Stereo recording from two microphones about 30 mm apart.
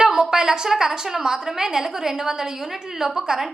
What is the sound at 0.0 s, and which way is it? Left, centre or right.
A woman's voice, right.